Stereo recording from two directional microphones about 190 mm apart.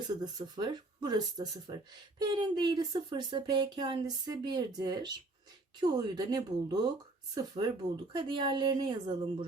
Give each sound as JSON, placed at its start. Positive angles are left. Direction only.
{"t": 0.1, "sound": "speech", "side_deg": -20}